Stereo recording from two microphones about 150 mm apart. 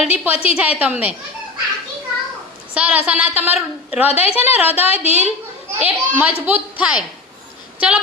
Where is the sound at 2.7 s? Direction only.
10° right (ahead or behind).